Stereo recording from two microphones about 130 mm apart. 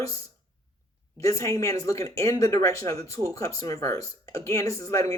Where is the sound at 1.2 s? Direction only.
25° left (ahead or behind).